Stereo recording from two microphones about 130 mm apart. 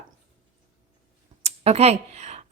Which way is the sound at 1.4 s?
55° right (ahead or behind).